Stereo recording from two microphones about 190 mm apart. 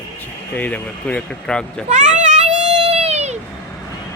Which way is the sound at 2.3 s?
35° right (ahead or behind).